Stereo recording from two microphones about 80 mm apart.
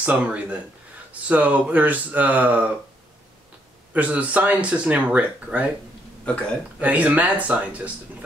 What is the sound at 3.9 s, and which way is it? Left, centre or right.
Speech, centre.